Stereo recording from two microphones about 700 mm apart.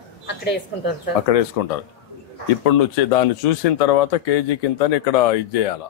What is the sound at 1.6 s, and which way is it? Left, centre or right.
A man's voice, left.